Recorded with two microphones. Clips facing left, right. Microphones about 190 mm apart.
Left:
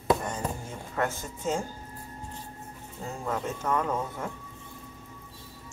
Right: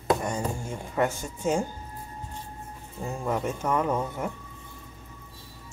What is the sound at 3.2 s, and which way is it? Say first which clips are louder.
Speech: right 3 dB; 15° right (ahead or behind).